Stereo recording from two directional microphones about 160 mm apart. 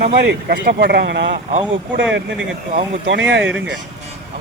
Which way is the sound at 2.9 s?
90° right.